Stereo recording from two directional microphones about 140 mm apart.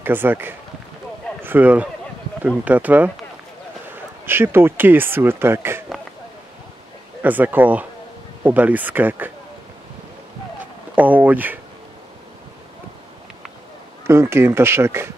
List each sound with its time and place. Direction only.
0.0 s speech: 15° right (ahead or behind)
7.2 s speech: 10° right (ahead or behind)
10.6 s speech: 10° right (ahead or behind)
14.0 s speech: 20° right (ahead or behind)